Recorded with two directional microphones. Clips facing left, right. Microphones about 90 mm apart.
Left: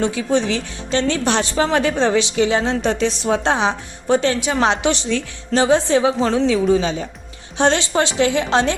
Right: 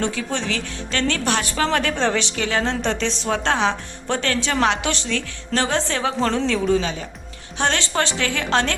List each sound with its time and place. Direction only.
0.0 s a woman's voice: 15° left (ahead or behind)